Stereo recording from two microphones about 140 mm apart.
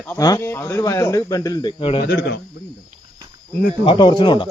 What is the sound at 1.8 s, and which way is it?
Speech, 40° left (ahead or behind).